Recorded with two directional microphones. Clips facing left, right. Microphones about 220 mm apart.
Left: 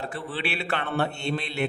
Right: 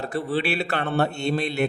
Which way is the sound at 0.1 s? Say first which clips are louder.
Right 7 dB; 40° right (ahead or behind).